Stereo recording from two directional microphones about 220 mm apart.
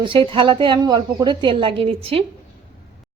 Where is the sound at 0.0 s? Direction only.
20° right (ahead or behind).